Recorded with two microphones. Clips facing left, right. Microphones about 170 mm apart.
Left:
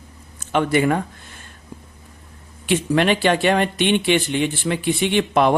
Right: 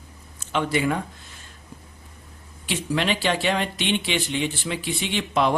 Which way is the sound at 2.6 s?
55° left (ahead or behind).